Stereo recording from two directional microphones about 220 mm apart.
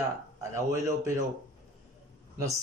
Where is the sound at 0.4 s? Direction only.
15° right (ahead or behind).